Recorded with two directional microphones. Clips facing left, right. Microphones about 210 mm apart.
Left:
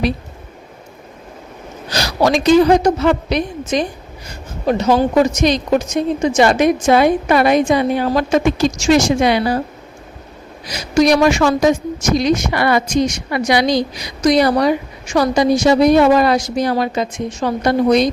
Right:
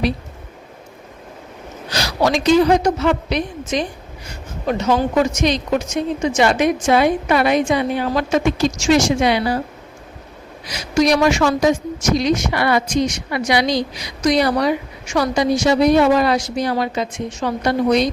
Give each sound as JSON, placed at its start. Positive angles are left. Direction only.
{"t": 1.9, "sound": "a sound", "side_deg": 40}
{"t": 2.8, "sound": "a woman's voice", "side_deg": 40}
{"t": 10.7, "sound": "a woman's voice", "side_deg": 45}